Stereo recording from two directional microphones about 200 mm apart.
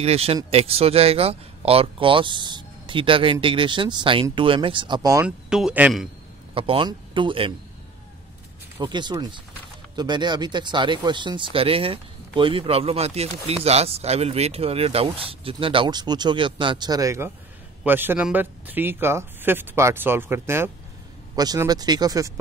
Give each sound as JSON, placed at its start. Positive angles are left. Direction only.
{"t": 0.0, "sound": "speech", "side_deg": -30}
{"t": 5.2, "sound": "speech", "side_deg": -5}
{"t": 6.5, "sound": "speech", "side_deg": -25}
{"t": 8.8, "sound": "speech", "side_deg": -20}